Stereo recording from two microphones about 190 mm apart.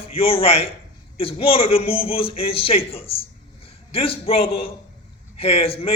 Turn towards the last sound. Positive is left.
turn(degrees=30)  # may be behind; listen again after turning